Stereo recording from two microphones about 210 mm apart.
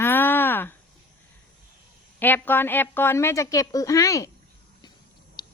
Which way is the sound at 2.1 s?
10° left (ahead or behind).